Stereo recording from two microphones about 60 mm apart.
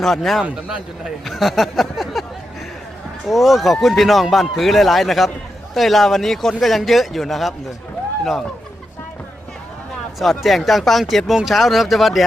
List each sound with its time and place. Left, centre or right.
0.0 s speech: centre
0.5 s speech: centre
3.2 s speech: centre
10.2 s speech: centre